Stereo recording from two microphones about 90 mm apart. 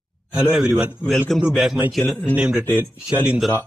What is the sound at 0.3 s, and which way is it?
A man's voice, 10° right (ahead or behind).